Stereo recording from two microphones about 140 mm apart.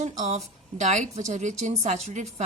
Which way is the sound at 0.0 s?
55° right (ahead or behind).